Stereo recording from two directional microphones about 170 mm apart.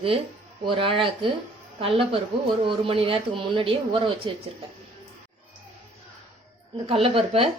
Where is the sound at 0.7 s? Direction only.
30° right (ahead or behind).